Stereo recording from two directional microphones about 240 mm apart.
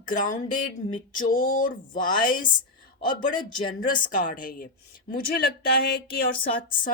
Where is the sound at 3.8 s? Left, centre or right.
Left.